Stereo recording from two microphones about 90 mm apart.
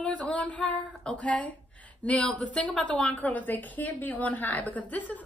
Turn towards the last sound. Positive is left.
turn(degrees=15)  # may be behind; listen again after turning